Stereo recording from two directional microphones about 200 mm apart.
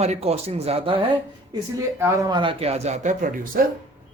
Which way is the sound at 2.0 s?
20° right (ahead or behind).